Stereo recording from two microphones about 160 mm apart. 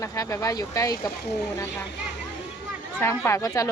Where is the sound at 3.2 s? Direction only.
20° left (ahead or behind).